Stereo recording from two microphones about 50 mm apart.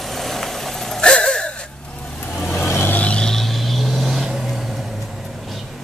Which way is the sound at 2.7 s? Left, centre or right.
Left.